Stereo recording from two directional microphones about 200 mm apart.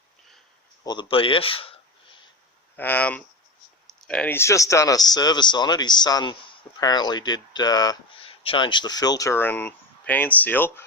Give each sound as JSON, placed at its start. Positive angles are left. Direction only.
{"t": 0.9, "sound": "speech", "side_deg": 25}
{"t": 2.7, "sound": "speech", "side_deg": 10}